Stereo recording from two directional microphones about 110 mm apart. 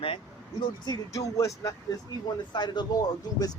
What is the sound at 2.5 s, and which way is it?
Speech, 40° left (ahead or behind).